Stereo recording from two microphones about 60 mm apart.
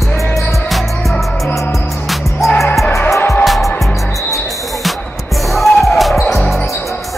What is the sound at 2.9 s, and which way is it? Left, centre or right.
Music, left.